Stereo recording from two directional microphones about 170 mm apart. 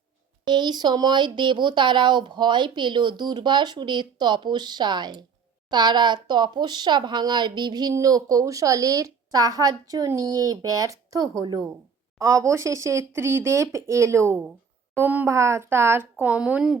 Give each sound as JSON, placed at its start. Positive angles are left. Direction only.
{"t": 0.4, "sound": "speech", "side_deg": -25}